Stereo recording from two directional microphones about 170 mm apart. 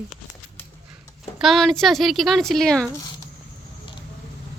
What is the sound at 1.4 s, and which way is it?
Speech, centre (ahead or behind).